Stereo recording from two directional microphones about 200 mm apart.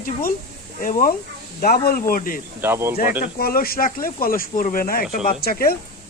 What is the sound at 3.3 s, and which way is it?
Speech, 50° left (ahead or behind).